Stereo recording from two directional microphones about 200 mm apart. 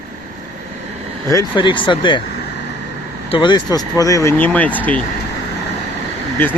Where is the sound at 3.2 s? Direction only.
25° left (ahead or behind); by 4.8 s 10° left (ahead or behind).